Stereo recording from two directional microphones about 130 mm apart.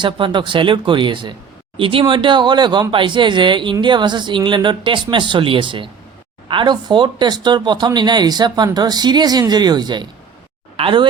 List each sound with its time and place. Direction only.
0.0 s speech: 35° right (ahead or behind)
10.8 s speech: 45° right (ahead or behind)